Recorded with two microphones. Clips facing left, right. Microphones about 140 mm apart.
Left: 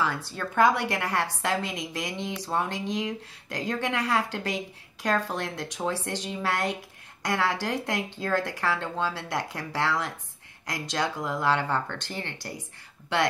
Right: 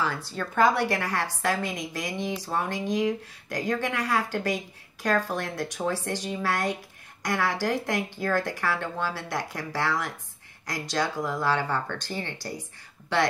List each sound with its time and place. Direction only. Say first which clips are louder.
0.6 s speech: even; 20° left (ahead or behind)